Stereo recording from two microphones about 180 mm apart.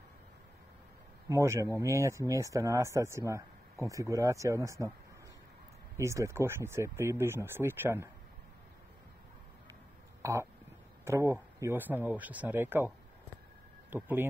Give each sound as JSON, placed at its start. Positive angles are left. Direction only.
{"t": 1.3, "sound": "speech", "side_deg": -15}
{"t": 5.9, "sound": "speech", "side_deg": -15}
{"t": 10.2, "sound": "speech", "side_deg": -15}